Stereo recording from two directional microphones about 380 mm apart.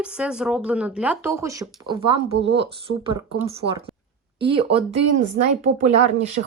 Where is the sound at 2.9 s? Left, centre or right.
Centre.